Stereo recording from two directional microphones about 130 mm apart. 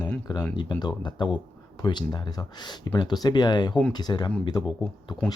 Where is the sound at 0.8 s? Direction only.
35° left (ahead or behind).